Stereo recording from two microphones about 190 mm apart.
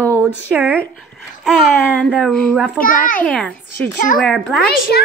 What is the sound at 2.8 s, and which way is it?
Speech, 45° left (ahead or behind).